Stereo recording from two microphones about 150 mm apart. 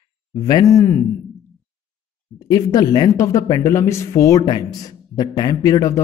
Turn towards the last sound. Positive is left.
turn(degrees=20)  # may be behind; listen again after turning